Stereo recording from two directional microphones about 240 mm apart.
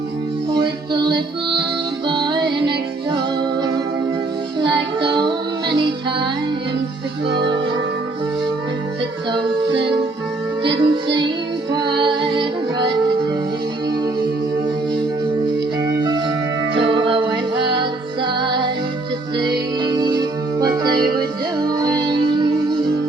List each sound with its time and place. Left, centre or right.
0.5 s music: centre
4.6 s child singing: centre
5.7 s music: centre
7.3 s music: centre
10.6 s music: centre
15.9 s music: centre
21.7 s music: centre